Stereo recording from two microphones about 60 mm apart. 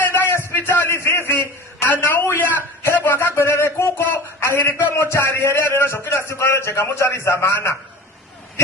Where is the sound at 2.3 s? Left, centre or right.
Left.